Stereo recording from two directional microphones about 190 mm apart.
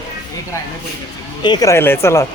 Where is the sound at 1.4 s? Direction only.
20° left (ahead or behind).